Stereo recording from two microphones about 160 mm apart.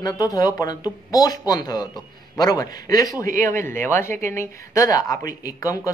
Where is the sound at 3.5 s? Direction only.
15° left (ahead or behind).